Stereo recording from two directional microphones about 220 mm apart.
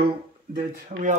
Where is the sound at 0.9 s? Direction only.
35° right (ahead or behind).